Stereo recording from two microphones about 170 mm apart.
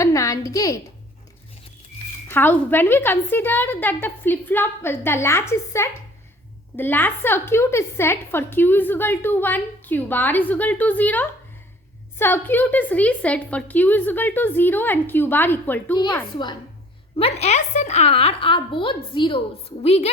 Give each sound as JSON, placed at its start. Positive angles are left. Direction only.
{"t": 0.0, "sound": "a woman's voice", "side_deg": 20}
{"t": 2.3, "sound": "a woman's voice", "side_deg": 10}
{"t": 17.2, "sound": "a woman's voice", "side_deg": 35}